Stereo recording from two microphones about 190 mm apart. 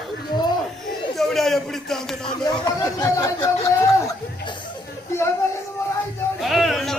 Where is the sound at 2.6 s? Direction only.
15° left (ahead or behind).